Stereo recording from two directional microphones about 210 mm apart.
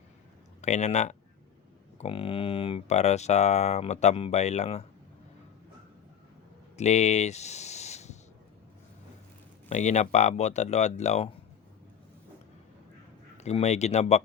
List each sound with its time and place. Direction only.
0.6 s speech: 35° left (ahead or behind)
6.7 s a sound: 35° left (ahead or behind)
9.6 s speech: 35° left (ahead or behind)
13.3 s speech: 30° left (ahead or behind)